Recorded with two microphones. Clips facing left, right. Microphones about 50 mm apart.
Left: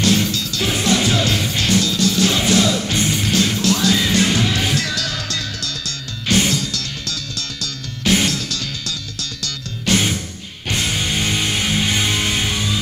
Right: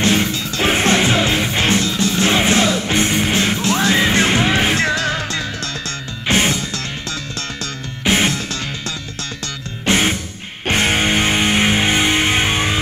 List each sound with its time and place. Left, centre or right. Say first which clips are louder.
0.0 s music: right 1 dB; right
10.7 s music: right 6 dB; right